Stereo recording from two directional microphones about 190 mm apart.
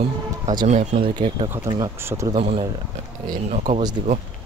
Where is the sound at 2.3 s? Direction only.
30° right (ahead or behind).